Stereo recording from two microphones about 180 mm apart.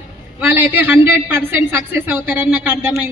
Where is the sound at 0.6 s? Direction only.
10° right (ahead or behind).